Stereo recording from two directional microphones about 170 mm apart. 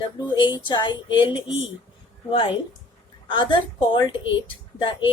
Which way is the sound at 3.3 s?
25° left (ahead or behind).